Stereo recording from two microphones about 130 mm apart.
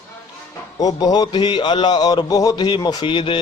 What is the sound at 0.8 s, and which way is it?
A man's voice, 30° left (ahead or behind).